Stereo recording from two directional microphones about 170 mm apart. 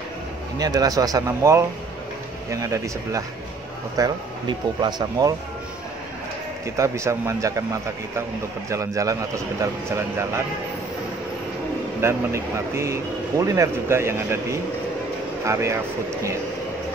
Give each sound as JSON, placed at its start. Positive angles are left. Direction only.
{"t": 0.6, "sound": "speech", "side_deg": -20}
{"t": 6.8, "sound": "speech", "side_deg": -15}
{"t": 12.0, "sound": "speech", "side_deg": -15}